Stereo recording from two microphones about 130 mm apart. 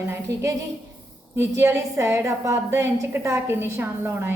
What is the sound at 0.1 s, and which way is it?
A woman's voice, 20° right (ahead or behind).